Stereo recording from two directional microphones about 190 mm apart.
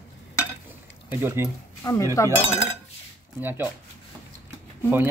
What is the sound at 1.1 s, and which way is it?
Speech, 10° right (ahead or behind).